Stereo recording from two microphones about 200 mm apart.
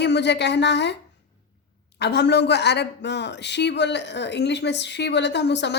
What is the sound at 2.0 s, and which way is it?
Speech, 60° left (ahead or behind).